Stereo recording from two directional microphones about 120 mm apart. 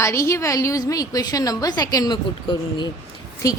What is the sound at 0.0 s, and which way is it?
A woman's voice, 25° left (ahead or behind).